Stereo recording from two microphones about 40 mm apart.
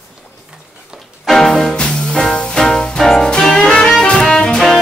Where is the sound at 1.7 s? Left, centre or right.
Centre.